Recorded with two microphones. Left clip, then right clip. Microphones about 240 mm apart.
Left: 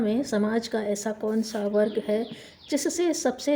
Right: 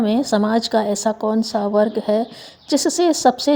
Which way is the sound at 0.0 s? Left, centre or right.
Right.